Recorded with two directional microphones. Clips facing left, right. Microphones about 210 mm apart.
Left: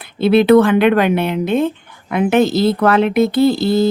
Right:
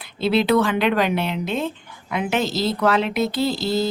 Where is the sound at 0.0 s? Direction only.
55° left (ahead or behind).